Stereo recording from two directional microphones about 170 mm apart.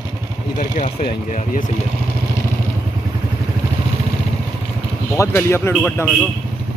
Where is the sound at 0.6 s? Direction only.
55° left (ahead or behind).